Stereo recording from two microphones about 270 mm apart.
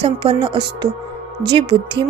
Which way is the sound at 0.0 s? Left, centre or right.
Centre.